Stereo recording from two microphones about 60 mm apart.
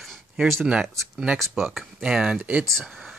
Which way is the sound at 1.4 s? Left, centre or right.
Centre.